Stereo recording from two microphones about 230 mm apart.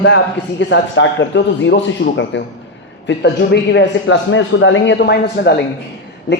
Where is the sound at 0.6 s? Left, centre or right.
Left.